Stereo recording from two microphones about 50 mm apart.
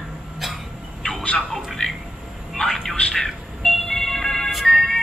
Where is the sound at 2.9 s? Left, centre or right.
Centre.